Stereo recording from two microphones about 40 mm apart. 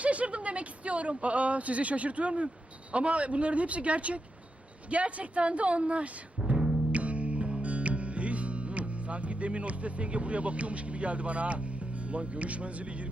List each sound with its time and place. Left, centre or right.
0.0 s speech: right
6.4 s timpani: right
6.9 s music: right
12.0 s speech: right